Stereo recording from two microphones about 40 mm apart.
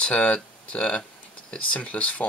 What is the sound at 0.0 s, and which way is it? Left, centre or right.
Speech, left.